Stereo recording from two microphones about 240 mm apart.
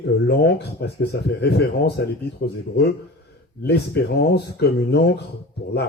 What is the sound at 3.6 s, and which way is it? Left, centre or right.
Speech, left.